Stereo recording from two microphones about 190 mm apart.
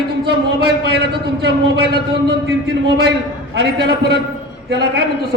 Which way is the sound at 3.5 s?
60° right (ahead or behind).